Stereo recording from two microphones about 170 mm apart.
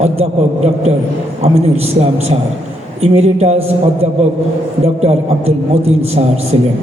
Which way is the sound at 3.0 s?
40° right (ahead or behind).